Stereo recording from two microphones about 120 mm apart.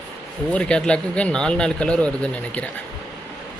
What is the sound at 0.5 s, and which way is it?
A man's voice, 10° left (ahead or behind).